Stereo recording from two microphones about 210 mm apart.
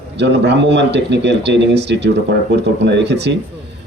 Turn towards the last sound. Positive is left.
turn(degrees=-55)  # may be behind; listen again after turning